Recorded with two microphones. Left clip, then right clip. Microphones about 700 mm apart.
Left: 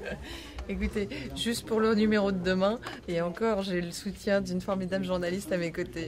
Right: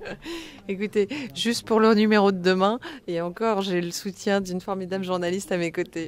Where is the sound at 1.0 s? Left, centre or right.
Right.